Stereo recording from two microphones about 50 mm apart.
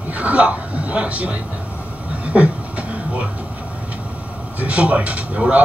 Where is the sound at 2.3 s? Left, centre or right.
Right.